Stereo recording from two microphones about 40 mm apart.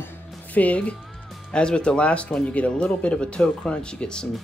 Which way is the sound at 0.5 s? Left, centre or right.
Left.